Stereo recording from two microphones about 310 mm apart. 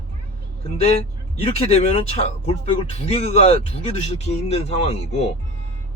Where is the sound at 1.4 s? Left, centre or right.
Centre.